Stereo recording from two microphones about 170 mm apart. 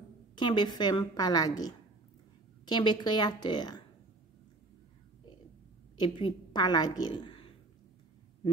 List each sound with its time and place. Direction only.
0.4 s a woman's voice: 25° left (ahead or behind)
5.9 s a woman's voice: 30° left (ahead or behind)